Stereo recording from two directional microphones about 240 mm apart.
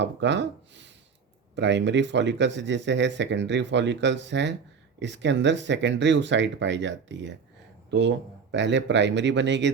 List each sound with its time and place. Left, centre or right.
0.0 s speech: right